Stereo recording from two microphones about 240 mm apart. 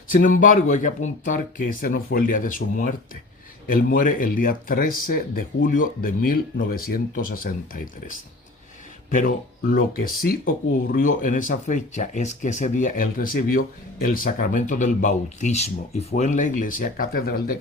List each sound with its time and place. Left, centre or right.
0.1 s speech: left
9.0 s speech: left